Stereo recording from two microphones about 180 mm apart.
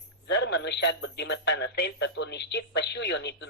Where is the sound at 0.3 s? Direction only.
75° left (ahead or behind).